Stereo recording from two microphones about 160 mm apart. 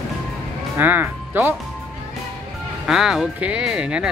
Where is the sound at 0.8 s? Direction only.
10° right (ahead or behind).